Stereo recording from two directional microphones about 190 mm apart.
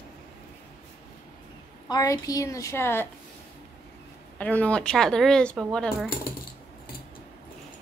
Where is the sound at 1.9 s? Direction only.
20° left (ahead or behind).